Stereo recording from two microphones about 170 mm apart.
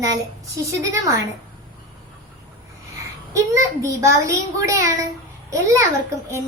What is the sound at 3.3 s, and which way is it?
A woman's voice, 15° right (ahead or behind).